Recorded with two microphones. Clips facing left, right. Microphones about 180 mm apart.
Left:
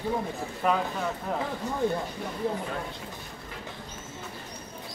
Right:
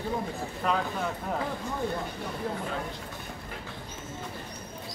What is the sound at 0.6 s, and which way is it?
Speech, 5° left (ahead or behind).